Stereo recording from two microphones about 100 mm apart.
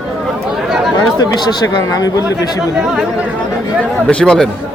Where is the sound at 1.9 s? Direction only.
35° left (ahead or behind).